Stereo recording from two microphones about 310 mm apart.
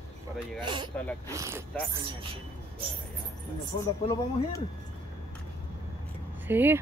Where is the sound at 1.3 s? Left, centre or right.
Centre.